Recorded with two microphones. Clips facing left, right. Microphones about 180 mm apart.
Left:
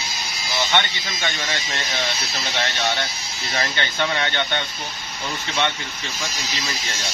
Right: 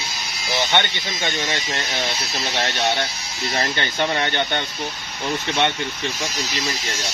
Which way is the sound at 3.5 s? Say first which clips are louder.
Right 1 dB; 35° right (ahead or behind).